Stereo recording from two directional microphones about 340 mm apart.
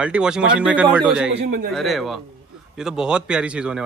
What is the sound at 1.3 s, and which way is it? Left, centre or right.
Speech, right.